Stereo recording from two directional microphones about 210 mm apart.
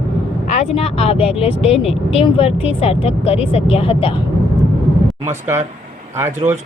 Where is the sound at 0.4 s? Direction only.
30° left (ahead or behind).